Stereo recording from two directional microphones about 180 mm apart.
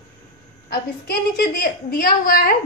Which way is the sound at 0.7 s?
60° left (ahead or behind).